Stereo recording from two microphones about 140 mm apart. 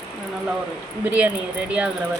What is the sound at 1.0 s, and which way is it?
Speech, 10° right (ahead or behind).